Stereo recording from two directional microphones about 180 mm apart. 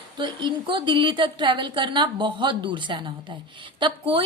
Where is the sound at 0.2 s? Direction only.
25° right (ahead or behind).